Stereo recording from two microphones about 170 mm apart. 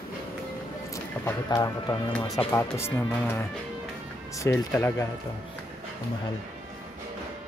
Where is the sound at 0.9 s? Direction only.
20° left (ahead or behind).